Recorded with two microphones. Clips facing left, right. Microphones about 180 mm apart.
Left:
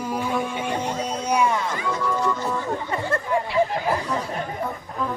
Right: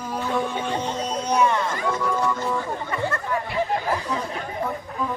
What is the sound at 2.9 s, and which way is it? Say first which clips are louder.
Speech: left 2 dB; 25° left (ahead or behind).